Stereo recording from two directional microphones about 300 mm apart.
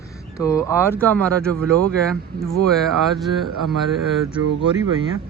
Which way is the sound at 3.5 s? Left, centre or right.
Right.